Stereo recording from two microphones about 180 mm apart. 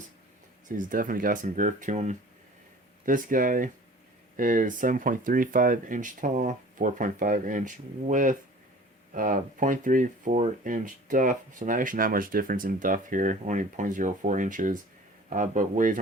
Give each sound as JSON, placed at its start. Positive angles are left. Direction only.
{"t": 0.8, "sound": "speech", "side_deg": -50}